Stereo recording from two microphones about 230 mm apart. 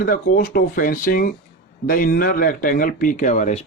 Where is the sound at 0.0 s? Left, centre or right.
Left.